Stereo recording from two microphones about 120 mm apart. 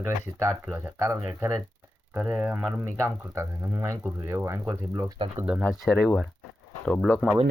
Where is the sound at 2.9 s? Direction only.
25° right (ahead or behind).